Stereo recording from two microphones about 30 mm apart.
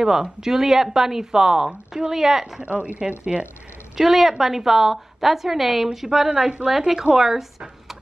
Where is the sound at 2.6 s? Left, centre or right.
Right.